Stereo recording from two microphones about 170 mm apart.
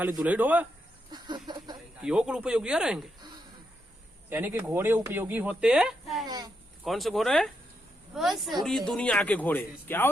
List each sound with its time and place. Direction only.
0.2 s speech: 10° right (ahead or behind)
1.1 s a sound: 25° right (ahead or behind)
2.0 s speech: 5° right (ahead or behind)
4.3 s speech: 10° right (ahead or behind)
6.2 s a sound: 25° right (ahead or behind)
6.8 s speech: centre (ahead or behind)